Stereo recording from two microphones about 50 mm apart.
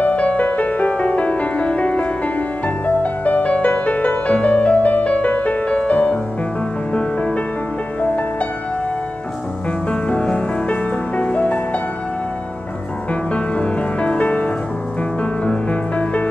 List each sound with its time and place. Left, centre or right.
0.0 s music: left
9.8 s music: left
13.1 s music: left